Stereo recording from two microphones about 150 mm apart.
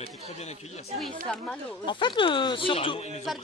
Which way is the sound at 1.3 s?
5° left (ahead or behind).